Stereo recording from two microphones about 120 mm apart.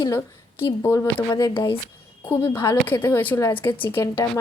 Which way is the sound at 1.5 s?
45° left (ahead or behind).